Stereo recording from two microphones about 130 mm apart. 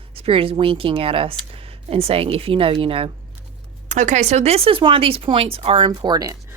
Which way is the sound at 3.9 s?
70° right (ahead or behind).